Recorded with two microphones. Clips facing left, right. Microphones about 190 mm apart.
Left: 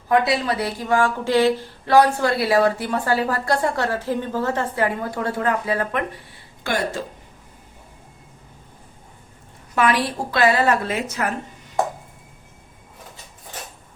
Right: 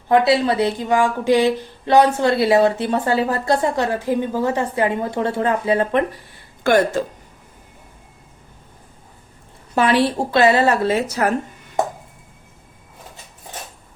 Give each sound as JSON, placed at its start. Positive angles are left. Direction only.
{"t": 0.1, "sound": "a woman's voice", "side_deg": -30}
{"t": 6.7, "sound": "speech", "side_deg": -50}
{"t": 9.7, "sound": "a woman's voice", "side_deg": -30}